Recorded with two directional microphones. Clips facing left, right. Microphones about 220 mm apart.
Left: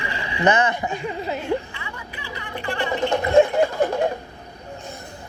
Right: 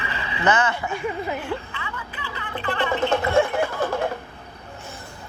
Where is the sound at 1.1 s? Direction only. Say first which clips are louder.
Left 3 dB; 15° left (ahead or behind).